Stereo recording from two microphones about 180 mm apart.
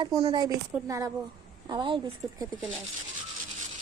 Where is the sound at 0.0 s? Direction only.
20° right (ahead or behind).